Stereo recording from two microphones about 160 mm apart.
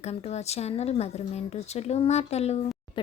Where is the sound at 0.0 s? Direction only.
45° left (ahead or behind).